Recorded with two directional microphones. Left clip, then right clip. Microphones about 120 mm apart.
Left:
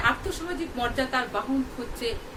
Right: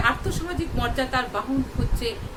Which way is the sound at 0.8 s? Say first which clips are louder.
Right 1 dB; 15° right (ahead or behind).